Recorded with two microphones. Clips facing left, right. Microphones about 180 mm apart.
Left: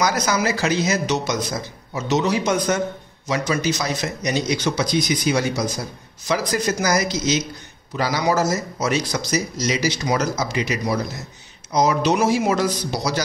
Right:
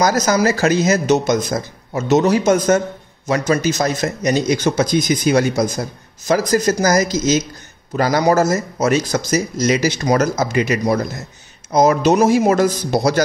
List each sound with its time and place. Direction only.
0.0 s speech: 40° right (ahead or behind)